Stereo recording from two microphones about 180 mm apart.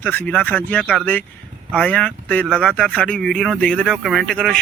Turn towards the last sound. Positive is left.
turn(degrees=5)  # may be behind; listen again after turning